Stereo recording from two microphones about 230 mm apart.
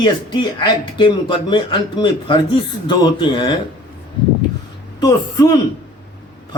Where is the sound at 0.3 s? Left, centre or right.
Centre.